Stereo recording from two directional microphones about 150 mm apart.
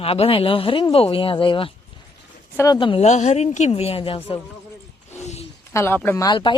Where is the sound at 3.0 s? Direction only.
50° left (ahead or behind).